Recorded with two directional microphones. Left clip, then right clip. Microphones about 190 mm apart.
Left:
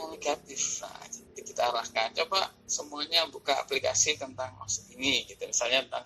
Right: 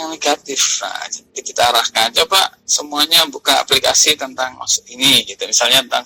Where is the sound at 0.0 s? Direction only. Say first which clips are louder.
Right 15 dB; 45° right (ahead or behind).